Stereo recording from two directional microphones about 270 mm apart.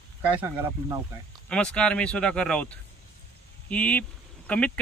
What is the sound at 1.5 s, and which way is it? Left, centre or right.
Speech, centre.